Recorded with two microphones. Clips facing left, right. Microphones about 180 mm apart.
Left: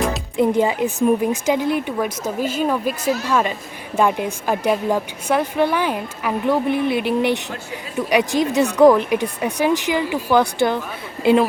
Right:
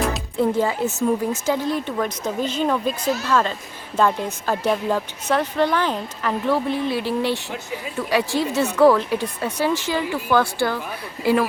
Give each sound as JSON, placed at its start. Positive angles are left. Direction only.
{"t": 0.3, "sound": "a woman's voice", "side_deg": 15}